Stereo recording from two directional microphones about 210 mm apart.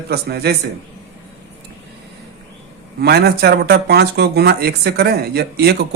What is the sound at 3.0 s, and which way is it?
Speech, 50° right (ahead or behind).